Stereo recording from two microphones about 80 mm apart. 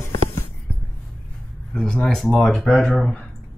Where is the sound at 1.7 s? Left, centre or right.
Centre.